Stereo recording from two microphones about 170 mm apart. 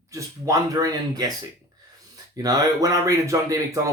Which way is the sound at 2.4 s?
20° right (ahead or behind).